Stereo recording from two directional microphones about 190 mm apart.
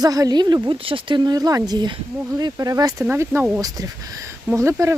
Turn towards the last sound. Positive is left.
turn(degrees=-15)  # may be behind; listen again after turning